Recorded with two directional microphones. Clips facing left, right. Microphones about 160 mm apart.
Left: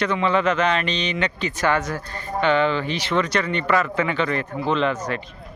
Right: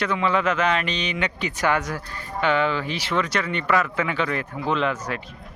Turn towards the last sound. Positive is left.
turn(degrees=-5)  # may be behind; listen again after turning